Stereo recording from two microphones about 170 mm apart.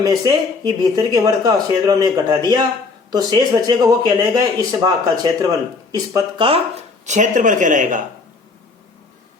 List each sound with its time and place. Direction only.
0.0 s speech: 25° right (ahead or behind)
7.0 s speech: 45° right (ahead or behind)